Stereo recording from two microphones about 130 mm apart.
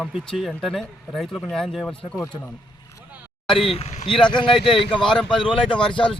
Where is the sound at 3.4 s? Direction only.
45° left (ahead or behind).